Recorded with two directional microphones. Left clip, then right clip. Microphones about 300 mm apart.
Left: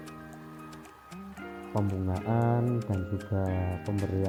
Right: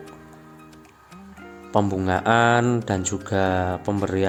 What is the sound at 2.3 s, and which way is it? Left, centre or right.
Speech, right.